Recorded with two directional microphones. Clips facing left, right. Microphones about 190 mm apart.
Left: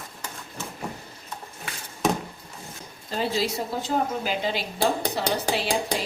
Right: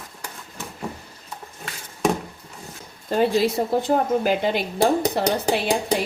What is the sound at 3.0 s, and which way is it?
Speech, 50° right (ahead or behind).